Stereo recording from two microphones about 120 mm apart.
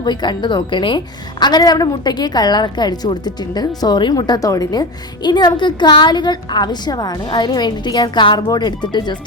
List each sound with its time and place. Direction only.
0.0 s a woman's voice: 40° left (ahead or behind)